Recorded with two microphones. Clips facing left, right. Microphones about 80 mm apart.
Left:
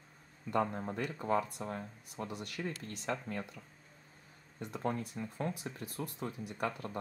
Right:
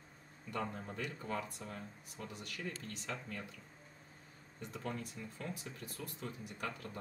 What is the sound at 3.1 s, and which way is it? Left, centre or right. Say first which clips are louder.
Speech: left 7 dB; left.